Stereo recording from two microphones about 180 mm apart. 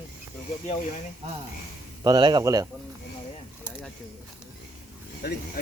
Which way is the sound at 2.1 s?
25° right (ahead or behind).